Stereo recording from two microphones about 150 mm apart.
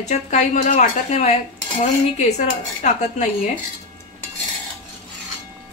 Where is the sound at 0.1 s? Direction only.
55° left (ahead or behind).